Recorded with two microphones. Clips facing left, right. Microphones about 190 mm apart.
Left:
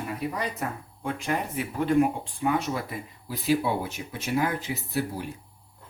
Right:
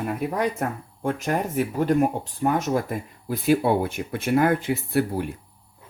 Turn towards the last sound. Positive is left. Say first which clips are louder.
# right 6 dB
turn(degrees=-55)  # may be behind; listen again after turning